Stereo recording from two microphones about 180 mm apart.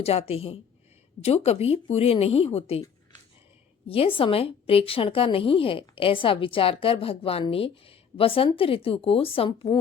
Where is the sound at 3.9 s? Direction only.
30° left (ahead or behind).